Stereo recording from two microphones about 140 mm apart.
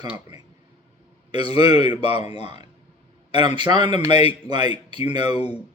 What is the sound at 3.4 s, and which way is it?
Speech, 35° right (ahead or behind).